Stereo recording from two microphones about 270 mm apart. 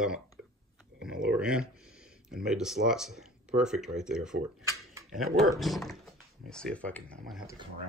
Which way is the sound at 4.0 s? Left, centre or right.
Centre.